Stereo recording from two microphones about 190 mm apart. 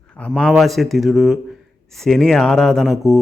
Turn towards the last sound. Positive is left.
turn(degrees=0)  # may be behind; listen again after turning